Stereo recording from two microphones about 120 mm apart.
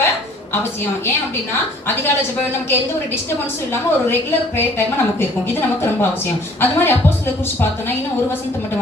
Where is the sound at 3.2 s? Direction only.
20° left (ahead or behind).